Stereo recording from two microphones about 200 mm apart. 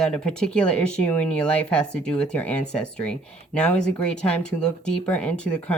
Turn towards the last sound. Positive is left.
turn(degrees=5)  # may be behind; listen again after turning